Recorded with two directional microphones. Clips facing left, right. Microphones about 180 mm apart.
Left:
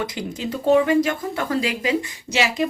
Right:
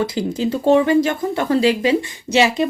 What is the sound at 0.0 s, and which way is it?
Speech, 35° right (ahead or behind).